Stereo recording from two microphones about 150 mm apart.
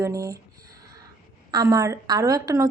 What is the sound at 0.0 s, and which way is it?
Speech, 20° right (ahead or behind).